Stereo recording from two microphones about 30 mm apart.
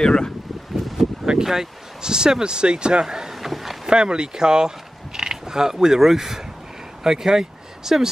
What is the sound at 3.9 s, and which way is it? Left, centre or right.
Speech, right.